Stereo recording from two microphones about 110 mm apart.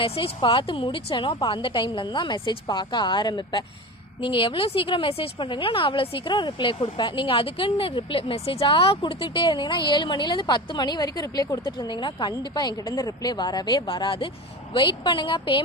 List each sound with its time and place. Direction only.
0.0 s speech: 55° left (ahead or behind)